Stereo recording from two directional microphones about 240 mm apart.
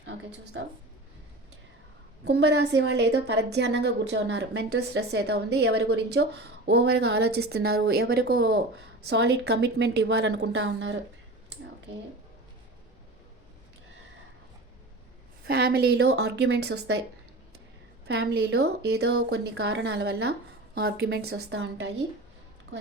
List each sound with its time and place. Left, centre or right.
0.0 s speech: right
2.2 s a woman's voice: right
15.4 s a woman's voice: right
18.1 s a woman's voice: right